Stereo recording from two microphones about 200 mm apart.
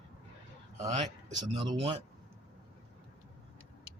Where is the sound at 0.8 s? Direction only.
35° right (ahead or behind).